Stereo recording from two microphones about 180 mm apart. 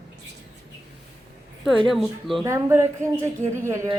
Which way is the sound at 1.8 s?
Centre (ahead or behind).